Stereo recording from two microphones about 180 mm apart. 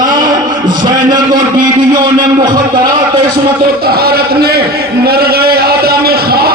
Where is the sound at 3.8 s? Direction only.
60° right (ahead or behind).